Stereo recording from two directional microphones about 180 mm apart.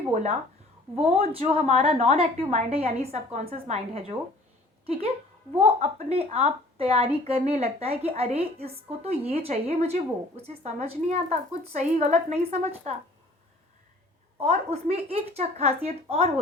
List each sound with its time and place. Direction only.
0.1 s a woman's voice: 40° right (ahead or behind)
14.3 s a woman's voice: 35° right (ahead or behind)